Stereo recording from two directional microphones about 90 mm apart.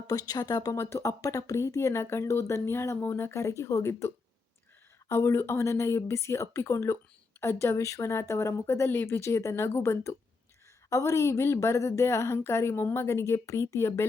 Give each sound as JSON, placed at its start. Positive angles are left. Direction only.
{"t": 0.1, "sound": "speech", "side_deg": 45}